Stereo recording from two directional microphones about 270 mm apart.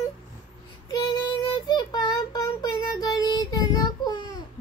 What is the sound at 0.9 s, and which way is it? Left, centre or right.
Child singing, centre.